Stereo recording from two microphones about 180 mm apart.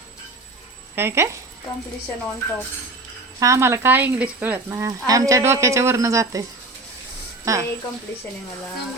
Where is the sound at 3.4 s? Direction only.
15° right (ahead or behind).